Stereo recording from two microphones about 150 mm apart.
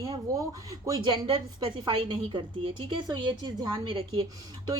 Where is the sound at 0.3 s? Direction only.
25° right (ahead or behind).